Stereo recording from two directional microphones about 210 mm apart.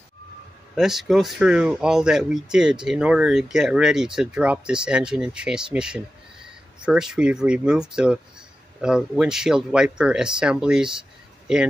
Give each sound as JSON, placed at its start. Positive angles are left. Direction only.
{"t": 0.7, "sound": "speech", "side_deg": 0}